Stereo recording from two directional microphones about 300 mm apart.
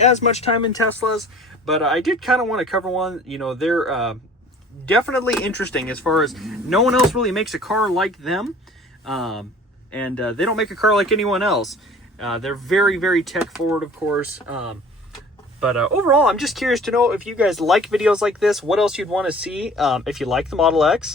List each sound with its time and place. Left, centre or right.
0.0 s speech: left
1.6 s speech: centre
15.6 s speech: centre